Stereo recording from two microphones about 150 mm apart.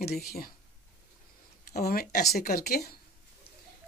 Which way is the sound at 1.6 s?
85° left.